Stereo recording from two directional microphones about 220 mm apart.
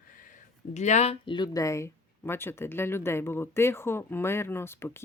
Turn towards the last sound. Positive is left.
turn(degrees=10)  # may be behind; listen again after turning